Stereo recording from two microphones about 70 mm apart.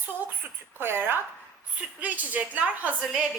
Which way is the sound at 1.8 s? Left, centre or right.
Right.